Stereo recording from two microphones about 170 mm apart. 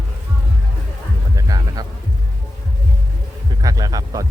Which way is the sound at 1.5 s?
20° right (ahead or behind).